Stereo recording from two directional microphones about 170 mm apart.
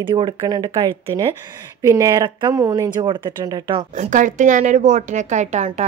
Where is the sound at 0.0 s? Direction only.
25° right (ahead or behind).